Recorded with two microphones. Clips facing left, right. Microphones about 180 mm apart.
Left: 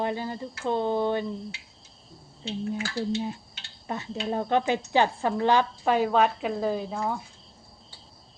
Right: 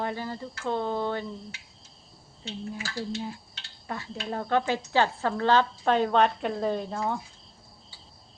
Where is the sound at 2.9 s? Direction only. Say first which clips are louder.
Left 3 dB; 25° left (ahead or behind); by 7.2 s centre (ahead or behind).